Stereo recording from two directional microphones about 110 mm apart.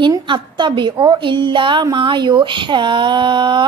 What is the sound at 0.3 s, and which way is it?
A woman's voice, 45° right (ahead or behind).